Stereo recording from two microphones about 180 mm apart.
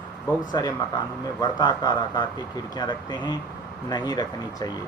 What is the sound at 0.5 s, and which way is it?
Speech, 20° left (ahead or behind).